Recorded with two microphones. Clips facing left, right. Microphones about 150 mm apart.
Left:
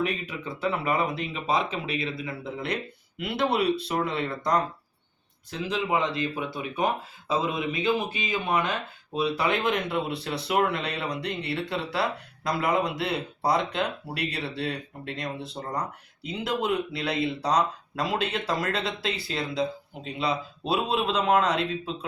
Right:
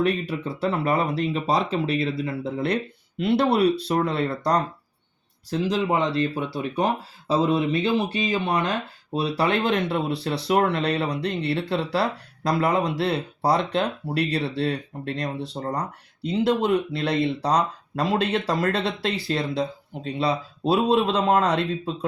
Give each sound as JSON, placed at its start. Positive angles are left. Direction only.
{"t": 0.0, "sound": "speech", "side_deg": -35}